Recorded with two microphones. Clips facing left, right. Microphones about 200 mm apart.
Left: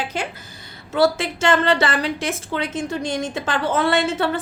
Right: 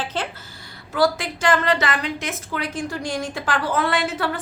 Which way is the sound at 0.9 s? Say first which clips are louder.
Left 2 dB; 25° left (ahead or behind).